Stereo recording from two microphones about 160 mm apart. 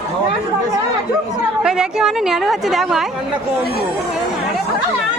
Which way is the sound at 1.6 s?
5° right (ahead or behind).